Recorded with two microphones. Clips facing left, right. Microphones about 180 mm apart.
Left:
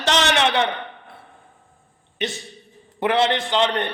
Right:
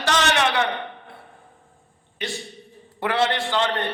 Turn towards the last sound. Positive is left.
turn(degrees=20)  # may be behind; listen again after turning